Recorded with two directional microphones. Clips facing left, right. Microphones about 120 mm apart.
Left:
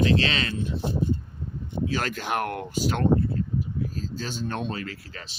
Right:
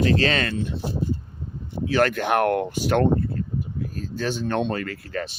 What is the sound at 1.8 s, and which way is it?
Speech, 65° right (ahead or behind).